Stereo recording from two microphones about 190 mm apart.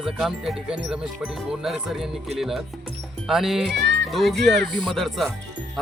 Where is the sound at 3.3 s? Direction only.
Centre (ahead or behind).